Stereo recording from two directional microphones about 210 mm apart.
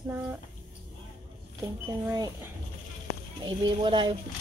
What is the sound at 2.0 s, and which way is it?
Speech, 15° right (ahead or behind).